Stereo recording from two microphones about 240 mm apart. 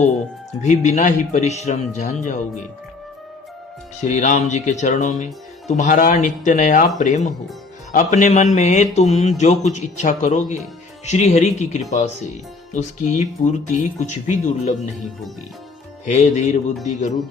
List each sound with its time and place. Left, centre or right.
0.6 s speech: left
4.0 s speech: left
16.0 s speech: left